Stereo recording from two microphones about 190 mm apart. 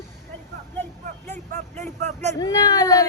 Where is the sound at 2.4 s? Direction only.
20° left (ahead or behind).